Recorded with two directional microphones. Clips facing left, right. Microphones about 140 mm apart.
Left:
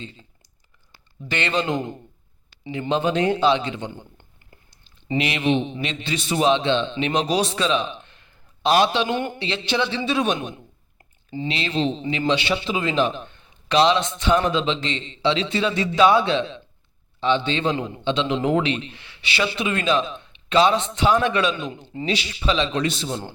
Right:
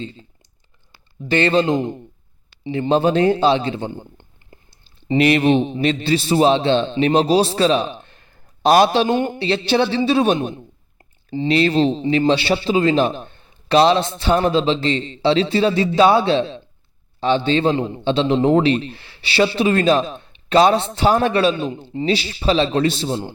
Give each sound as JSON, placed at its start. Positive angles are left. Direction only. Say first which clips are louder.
{"t": 0.0, "sound": "speech", "louder": "right 7 dB", "side_deg": -35}
{"t": 1.3, "sound": "a man's voice", "louder": "right 7 dB", "side_deg": -35}
{"t": 2.9, "sound": "a man's voice", "louder": "right 5 dB", "side_deg": -35}
{"t": 4.2, "sound": "clicking", "louder": "right 5 dB", "side_deg": -30}
{"t": 5.1, "sound": "a man's voice", "louder": "right 7 dB", "side_deg": -40}